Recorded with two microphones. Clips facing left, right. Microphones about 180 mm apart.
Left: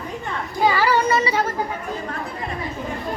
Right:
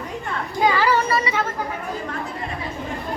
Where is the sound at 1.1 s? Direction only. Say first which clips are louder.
Left 2 dB; 25° left (ahead or behind).